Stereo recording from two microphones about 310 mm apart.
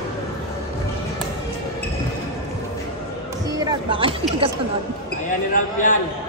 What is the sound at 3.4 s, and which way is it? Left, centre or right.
Speech, centre.